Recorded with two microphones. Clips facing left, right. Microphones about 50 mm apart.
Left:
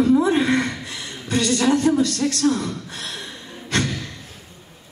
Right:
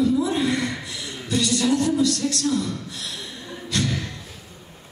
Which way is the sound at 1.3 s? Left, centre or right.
Left.